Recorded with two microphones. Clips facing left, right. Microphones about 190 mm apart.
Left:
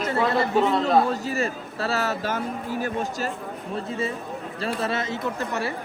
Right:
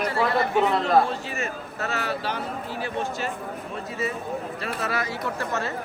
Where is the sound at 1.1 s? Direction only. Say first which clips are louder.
Left 4 dB; 35° left (ahead or behind).